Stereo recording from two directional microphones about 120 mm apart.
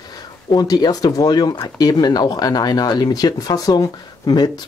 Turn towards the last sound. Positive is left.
turn(degrees=35)  # may be behind; listen again after turning